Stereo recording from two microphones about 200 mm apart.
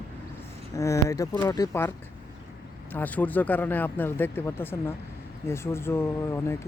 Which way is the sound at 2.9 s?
10° left (ahead or behind).